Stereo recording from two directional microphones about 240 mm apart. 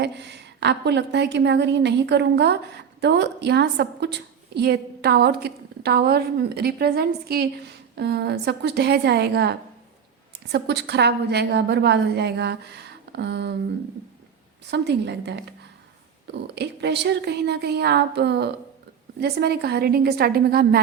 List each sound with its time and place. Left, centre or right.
0.0 s a woman's voice: right
14.7 s a woman's voice: right